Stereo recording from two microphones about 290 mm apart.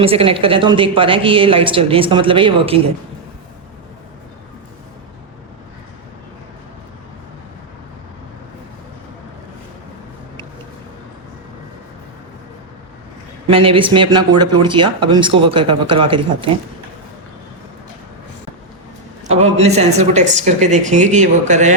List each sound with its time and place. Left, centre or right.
0.0 s speech: centre
13.5 s speech: centre
19.3 s speech: right